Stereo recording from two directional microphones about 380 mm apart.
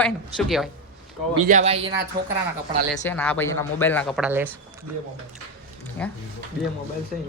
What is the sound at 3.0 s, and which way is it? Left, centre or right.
Speech, centre.